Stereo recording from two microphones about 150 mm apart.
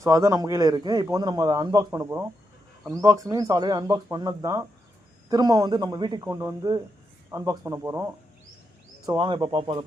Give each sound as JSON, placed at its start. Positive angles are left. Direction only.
{"t": 0.0, "sound": "a man's voice", "side_deg": -20}
{"t": 9.0, "sound": "speech", "side_deg": -35}